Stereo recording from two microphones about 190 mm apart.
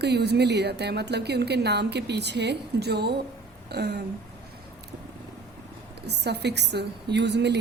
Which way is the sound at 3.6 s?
60° right (ahead or behind).